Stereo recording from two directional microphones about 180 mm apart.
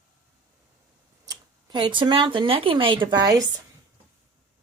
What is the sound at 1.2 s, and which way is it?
Speech, 20° right (ahead or behind).